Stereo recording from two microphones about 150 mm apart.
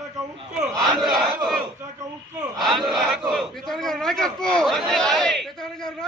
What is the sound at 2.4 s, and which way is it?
Battle cry, centre (ahead or behind).